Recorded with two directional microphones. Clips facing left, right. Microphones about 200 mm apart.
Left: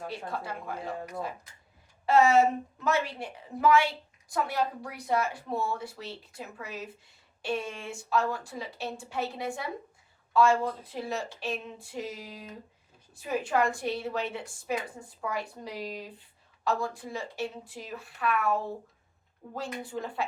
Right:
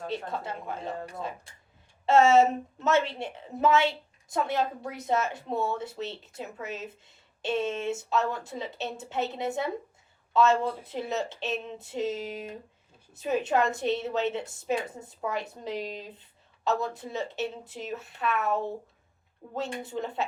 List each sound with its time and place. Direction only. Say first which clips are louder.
0.1 s a woman's voice: right 3 dB; 20° right (ahead or behind)